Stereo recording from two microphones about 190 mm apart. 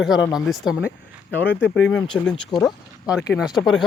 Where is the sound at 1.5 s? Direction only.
65° left (ahead or behind).